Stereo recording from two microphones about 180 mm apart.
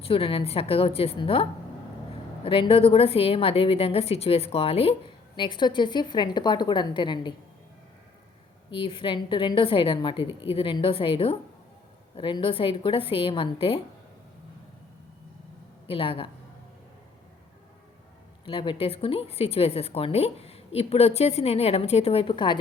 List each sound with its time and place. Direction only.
0.0 s a woman's voice: 30° left (ahead or behind)
8.7 s a woman's voice: 30° left (ahead or behind)
15.9 s a woman's voice: 30° left (ahead or behind)
18.4 s a woman's voice: 30° left (ahead or behind)